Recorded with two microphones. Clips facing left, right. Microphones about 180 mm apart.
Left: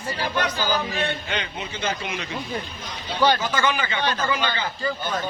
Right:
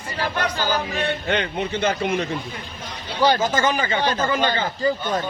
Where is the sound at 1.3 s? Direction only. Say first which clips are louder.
Right 7 dB; 60° right (ahead or behind).